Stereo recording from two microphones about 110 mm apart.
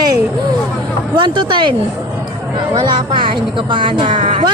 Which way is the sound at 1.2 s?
45° right (ahead or behind).